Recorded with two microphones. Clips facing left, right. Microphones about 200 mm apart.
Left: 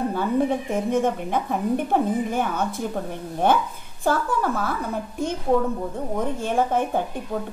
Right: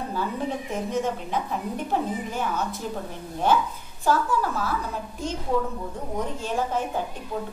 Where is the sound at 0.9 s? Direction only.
55° left (ahead or behind).